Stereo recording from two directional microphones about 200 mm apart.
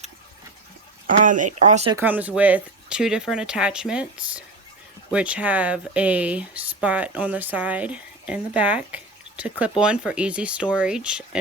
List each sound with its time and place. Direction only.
1.2 s speech: 40° right (ahead or behind)
2.0 s speech: 10° right (ahead or behind)